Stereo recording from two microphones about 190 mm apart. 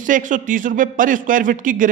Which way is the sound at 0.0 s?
45° right (ahead or behind).